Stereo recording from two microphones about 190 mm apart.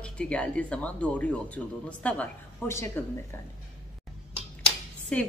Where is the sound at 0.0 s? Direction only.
5° left (ahead or behind).